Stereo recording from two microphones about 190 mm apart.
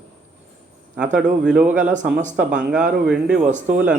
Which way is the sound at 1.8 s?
40° right (ahead or behind).